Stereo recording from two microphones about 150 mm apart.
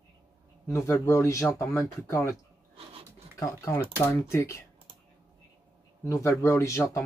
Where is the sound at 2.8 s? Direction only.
40° right (ahead or behind).